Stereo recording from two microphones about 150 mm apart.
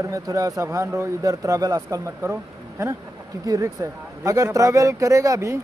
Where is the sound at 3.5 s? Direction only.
20° right (ahead or behind).